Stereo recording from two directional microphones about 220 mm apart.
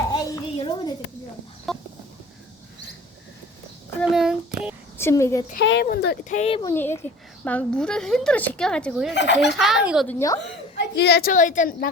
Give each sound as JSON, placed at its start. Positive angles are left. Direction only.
{"t": 0.1, "sound": "a sound", "side_deg": 20}
{"t": 1.7, "sound": "a sound", "side_deg": 0}
{"t": 4.1, "sound": "a sound", "side_deg": 0}
{"t": 4.9, "sound": "a woman's voice", "side_deg": 10}
{"t": 5.5, "sound": "speech", "side_deg": 55}
{"t": 6.2, "sound": "a woman's voice", "side_deg": 30}
{"t": 6.6, "sound": "a woman's voice", "side_deg": 10}
{"t": 9.1, "sound": "speech", "side_deg": 55}
{"t": 9.6, "sound": "a woman's voice", "side_deg": 0}
{"t": 10.1, "sound": "speech", "side_deg": 15}
{"t": 10.8, "sound": "a woman's voice", "side_deg": 50}